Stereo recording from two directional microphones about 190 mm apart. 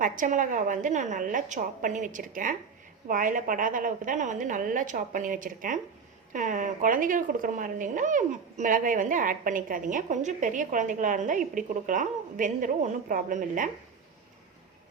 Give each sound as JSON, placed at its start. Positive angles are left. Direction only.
{"t": 0.0, "sound": "a woman's voice", "side_deg": -45}